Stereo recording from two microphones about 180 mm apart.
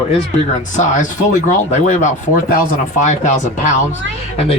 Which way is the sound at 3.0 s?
40° left (ahead or behind).